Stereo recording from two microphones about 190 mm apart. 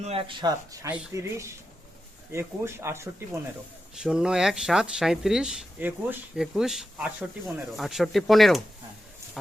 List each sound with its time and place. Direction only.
0.0 s speech: 30° right (ahead or behind); by 3.1 s 15° right (ahead or behind)
3.9 s speech: 5° right (ahead or behind)